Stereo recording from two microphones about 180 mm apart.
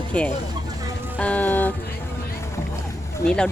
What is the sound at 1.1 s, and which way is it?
Music, 10° left (ahead or behind).